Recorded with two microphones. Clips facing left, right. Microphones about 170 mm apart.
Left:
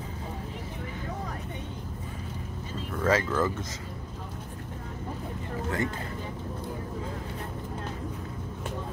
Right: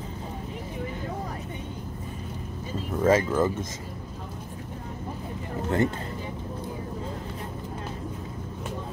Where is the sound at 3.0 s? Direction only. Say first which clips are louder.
Right 4 dB; 20° right (ahead or behind).